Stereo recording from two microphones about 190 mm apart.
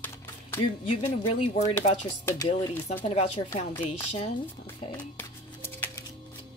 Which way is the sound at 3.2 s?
35° left (ahead or behind).